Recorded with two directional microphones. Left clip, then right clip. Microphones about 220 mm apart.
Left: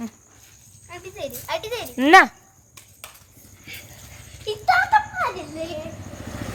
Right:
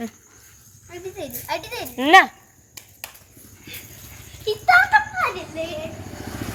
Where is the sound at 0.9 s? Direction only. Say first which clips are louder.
Even; 25° left (ahead or behind).